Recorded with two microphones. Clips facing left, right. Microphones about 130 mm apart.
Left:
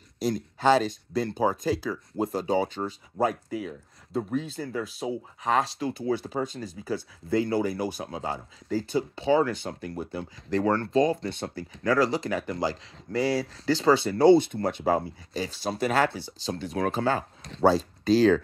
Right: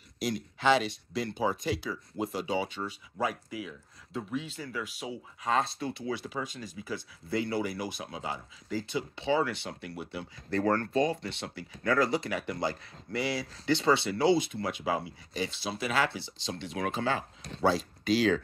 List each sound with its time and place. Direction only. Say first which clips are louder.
0.3 s speech: left 4 dB; 45° left (ahead or behind)